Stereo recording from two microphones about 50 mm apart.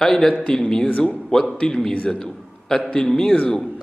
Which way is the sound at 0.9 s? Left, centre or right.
Left.